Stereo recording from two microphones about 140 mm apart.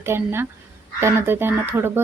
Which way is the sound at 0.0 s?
15° right (ahead or behind).